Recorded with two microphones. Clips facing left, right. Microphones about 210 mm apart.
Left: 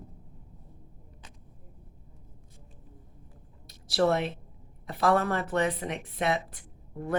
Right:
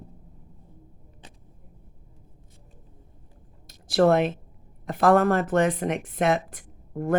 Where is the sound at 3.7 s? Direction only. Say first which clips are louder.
Right 6 dB; 50° right (ahead or behind).